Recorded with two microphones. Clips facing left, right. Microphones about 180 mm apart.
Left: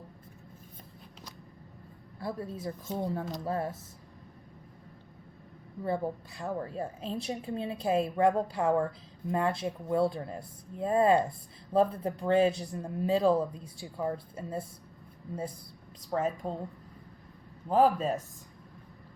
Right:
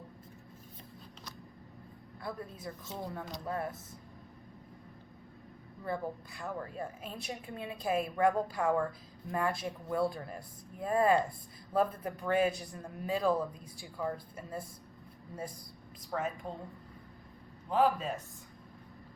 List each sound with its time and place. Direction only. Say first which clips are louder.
2.1 s a woman's voice: left 5 dB; 30° left (ahead or behind)
2.8 s a man's voice: left 8 dB; 40° left (ahead or behind)
5.8 s a woman's voice: left 5 dB; 25° left (ahead or behind)
16.0 s a man's voice: left 5 dB; 40° left (ahead or behind)
17.7 s a man's voice: left 4 dB; 40° left (ahead or behind)